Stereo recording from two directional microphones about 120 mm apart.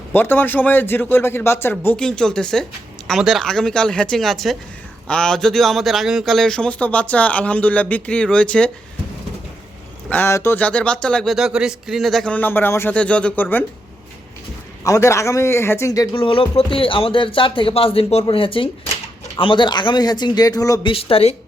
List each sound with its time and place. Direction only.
0.1 s speech: 15° left (ahead or behind)
10.1 s speech: 20° left (ahead or behind)
14.8 s speech: 25° left (ahead or behind)
16.1 s speech: 45° left (ahead or behind); by 20.8 s 30° left (ahead or behind)
20.8 s speech: 50° left (ahead or behind)